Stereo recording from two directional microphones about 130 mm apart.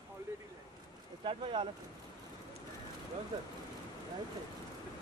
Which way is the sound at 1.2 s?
40° right (ahead or behind).